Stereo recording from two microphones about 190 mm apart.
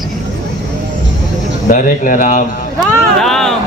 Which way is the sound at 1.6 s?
45° left (ahead or behind).